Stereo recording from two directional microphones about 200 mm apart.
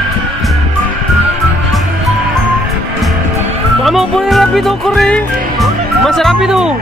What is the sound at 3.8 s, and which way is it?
Music, centre (ahead or behind).